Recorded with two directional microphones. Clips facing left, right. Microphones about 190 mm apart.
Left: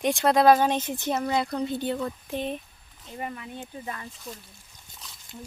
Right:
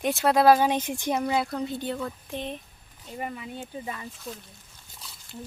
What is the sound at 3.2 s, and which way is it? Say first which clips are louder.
Speech: right 1 dB; 10° right (ahead or behind).